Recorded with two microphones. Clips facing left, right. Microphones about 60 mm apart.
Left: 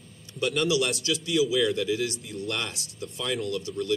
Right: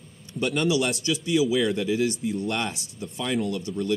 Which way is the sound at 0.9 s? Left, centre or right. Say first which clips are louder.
Right 3 dB; centre.